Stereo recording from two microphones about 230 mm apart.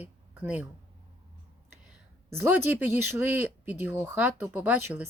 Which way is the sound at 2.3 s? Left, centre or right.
Centre.